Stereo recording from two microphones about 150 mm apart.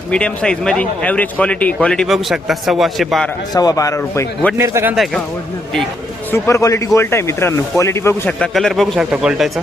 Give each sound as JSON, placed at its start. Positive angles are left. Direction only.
{"t": 0.1, "sound": "a man's voice", "side_deg": 5}
{"t": 3.5, "sound": "a man's voice", "side_deg": 25}
{"t": 4.5, "sound": "speech", "side_deg": -15}
{"t": 6.3, "sound": "speech", "side_deg": 20}